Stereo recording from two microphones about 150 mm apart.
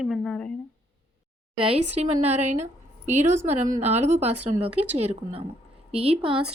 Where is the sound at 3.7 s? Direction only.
50° right (ahead or behind).